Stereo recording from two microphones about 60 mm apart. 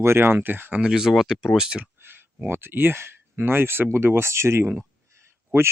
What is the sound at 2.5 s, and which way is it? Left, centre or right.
Speech, right.